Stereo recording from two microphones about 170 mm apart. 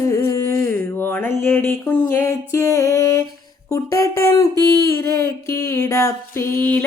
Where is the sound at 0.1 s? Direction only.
15° left (ahead or behind).